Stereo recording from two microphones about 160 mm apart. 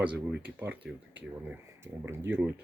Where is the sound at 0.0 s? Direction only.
10° right (ahead or behind).